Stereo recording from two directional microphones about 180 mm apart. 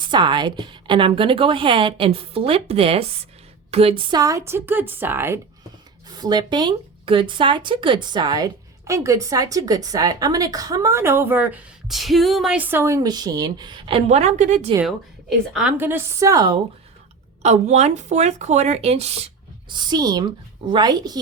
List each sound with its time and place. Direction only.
0.0 s speech: 25° right (ahead or behind)
15.5 s speech: 10° right (ahead or behind)
17.4 s speech: 40° right (ahead or behind)
19.7 s speech: 25° right (ahead or behind)